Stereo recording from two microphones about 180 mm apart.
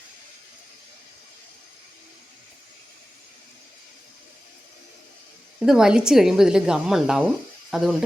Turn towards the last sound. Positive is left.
turn(degrees=0)  # may be behind; listen again after turning